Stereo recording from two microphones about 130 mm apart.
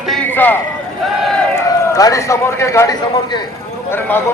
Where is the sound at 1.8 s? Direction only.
25° left (ahead or behind).